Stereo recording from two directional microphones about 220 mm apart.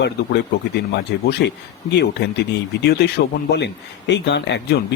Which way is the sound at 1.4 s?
45° left (ahead or behind).